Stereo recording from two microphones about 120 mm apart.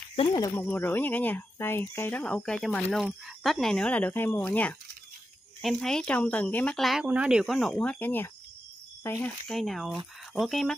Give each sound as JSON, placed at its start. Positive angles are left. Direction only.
{"t": 0.1, "sound": "speech", "side_deg": 50}
{"t": 0.6, "sound": "speech", "side_deg": 15}
{"t": 5.6, "sound": "speech", "side_deg": 0}
{"t": 6.8, "sound": "speech", "side_deg": 0}
{"t": 9.5, "sound": "speech", "side_deg": 0}